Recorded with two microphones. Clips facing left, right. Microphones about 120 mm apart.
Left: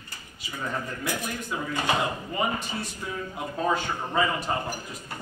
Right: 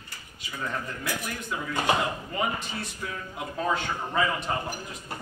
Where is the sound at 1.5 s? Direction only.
Centre (ahead or behind).